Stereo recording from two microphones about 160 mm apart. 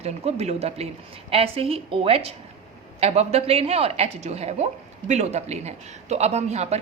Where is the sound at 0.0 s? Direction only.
40° right (ahead or behind).